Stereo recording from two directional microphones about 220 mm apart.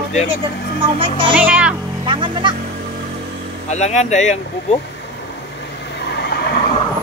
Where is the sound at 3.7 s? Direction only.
30° left (ahead or behind).